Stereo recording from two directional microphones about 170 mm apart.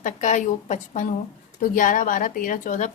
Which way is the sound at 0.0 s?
45° left (ahead or behind).